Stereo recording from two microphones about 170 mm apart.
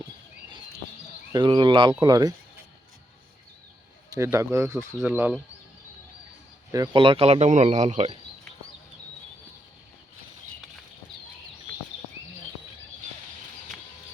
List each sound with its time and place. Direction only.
1.3 s speech: 25° right (ahead or behind)
4.1 s speech: 20° right (ahead or behind)
6.7 s speech: 15° right (ahead or behind)
6.9 s speech: 30° right (ahead or behind)